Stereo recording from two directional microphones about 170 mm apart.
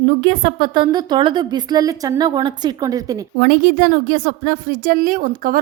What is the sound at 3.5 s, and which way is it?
A woman's voice, 60° right (ahead or behind).